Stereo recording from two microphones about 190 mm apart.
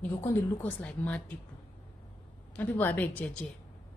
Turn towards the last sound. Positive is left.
turn(degrees=10)  # may be behind; listen again after turning